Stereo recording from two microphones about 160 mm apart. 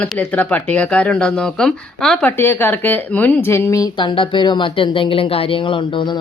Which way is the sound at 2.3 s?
15° left (ahead or behind).